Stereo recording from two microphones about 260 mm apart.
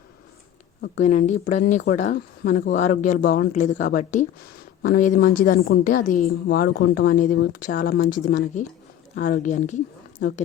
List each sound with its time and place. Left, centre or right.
0.8 s a woman's voice: left